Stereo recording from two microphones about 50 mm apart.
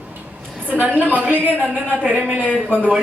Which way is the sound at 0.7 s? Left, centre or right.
Right.